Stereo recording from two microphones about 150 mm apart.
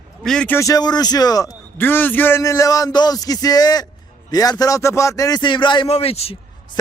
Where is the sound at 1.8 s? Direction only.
15° left (ahead or behind).